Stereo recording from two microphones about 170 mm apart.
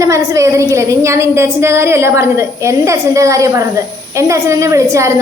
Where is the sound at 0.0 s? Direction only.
20° right (ahead or behind).